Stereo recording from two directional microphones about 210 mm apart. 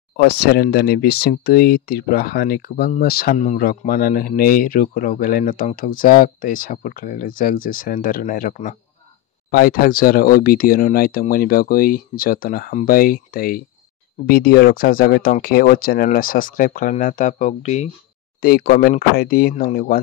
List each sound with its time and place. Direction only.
0.2 s speech: 50° left (ahead or behind); by 17.8 s 35° left (ahead or behind)
18.4 s speech: 45° left (ahead or behind)